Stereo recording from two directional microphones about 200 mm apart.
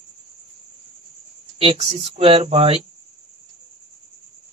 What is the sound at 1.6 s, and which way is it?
Speech, 30° right (ahead or behind).